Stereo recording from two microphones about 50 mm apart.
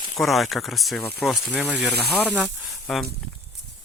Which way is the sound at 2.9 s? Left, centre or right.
Centre.